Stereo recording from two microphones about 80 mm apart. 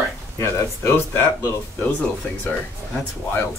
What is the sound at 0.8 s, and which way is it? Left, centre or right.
Speech, left.